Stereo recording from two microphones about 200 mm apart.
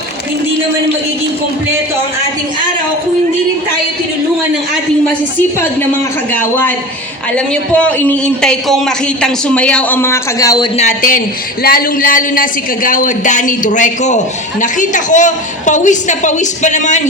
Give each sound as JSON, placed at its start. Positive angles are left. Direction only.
{"t": 6.3, "sound": "a man's voice", "side_deg": 10}
{"t": 10.8, "sound": "a woman's voice", "side_deg": 40}